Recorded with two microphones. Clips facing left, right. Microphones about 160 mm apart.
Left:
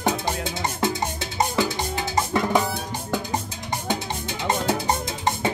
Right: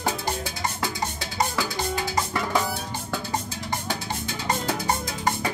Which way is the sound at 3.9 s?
25° left (ahead or behind).